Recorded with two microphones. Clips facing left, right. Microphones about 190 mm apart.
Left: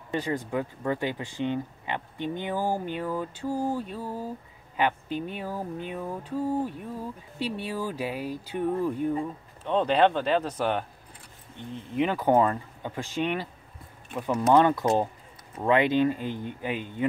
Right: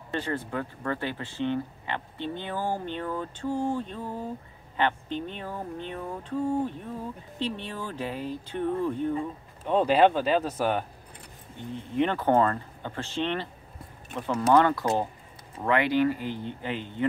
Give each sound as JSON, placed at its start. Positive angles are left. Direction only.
{"t": 0.1, "sound": "speech", "side_deg": 10}
{"t": 9.7, "sound": "speech", "side_deg": -5}
{"t": 11.9, "sound": "speech", "side_deg": 5}